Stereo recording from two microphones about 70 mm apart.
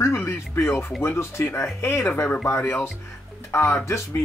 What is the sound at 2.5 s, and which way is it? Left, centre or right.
Speech, left.